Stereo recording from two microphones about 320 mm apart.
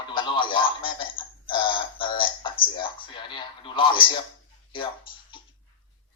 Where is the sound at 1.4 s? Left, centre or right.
Centre.